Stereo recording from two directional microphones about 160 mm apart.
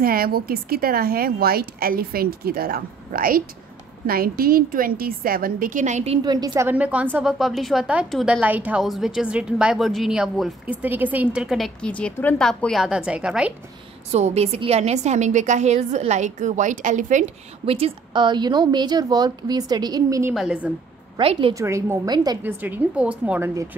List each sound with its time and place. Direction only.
0.0 s a woman's voice: 65° right (ahead or behind); by 6.1 s 45° right (ahead or behind)
6.2 s a woman's voice: 25° right (ahead or behind)
6.7 s a woman's voice: 10° right (ahead or behind)
14.1 s a woman's voice: 40° right (ahead or behind); by 20.3 s 20° right (ahead or behind)
20.3 s a woman's voice: 5° right (ahead or behind)
21.2 s a woman's voice: 35° right (ahead or behind)
21.5 s a woman's voice: 20° right (ahead or behind)
22.4 s a woman's voice: 10° right (ahead or behind)